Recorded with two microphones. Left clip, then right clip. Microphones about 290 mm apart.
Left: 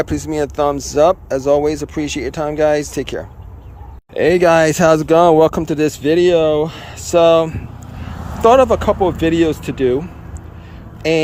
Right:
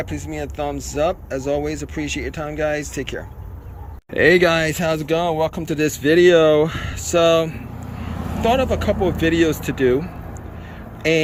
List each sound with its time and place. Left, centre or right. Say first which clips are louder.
0.0 s speech: left 9 dB; centre